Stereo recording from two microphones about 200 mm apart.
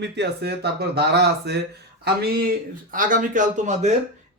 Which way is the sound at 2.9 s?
40° right (ahead or behind).